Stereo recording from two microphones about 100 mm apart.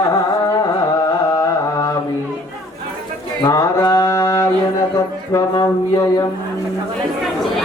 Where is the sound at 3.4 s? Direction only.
40° left (ahead or behind).